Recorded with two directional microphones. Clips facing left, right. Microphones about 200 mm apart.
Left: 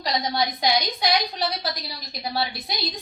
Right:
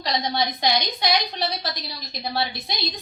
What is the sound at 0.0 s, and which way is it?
A woman's voice, 5° left (ahead or behind).